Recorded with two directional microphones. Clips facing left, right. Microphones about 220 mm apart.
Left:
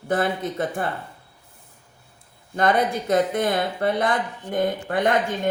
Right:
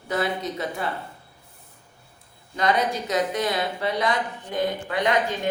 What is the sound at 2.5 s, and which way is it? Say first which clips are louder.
Speech: left 3 dB; 55° left (ahead or behind).